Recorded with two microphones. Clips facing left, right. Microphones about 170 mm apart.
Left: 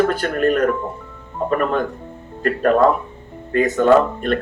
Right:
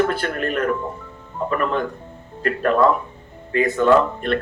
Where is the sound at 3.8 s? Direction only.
45° left (ahead or behind).